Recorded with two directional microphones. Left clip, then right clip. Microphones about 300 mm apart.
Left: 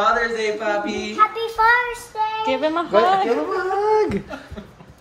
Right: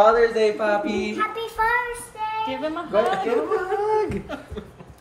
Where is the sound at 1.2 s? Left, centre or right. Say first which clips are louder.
Left 8 dB; centre.